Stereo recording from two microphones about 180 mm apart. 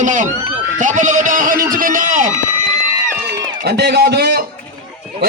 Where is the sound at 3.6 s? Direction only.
65° right (ahead or behind).